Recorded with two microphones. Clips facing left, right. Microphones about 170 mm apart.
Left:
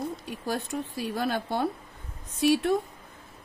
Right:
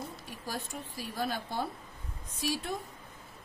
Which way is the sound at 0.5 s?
75° left (ahead or behind).